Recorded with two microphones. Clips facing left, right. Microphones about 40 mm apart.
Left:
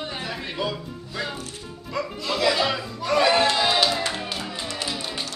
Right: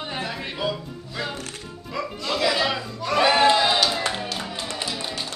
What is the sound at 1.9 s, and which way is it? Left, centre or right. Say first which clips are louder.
Chuckle: even; centre.